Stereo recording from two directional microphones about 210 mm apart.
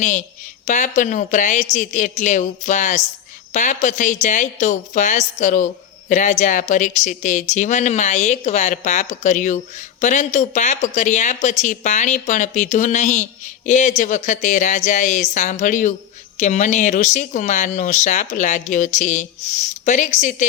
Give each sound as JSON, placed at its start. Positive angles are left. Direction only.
{"t": 0.0, "sound": "speech", "side_deg": 35}